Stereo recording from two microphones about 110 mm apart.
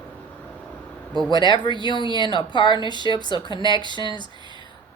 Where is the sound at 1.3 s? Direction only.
45° left (ahead or behind).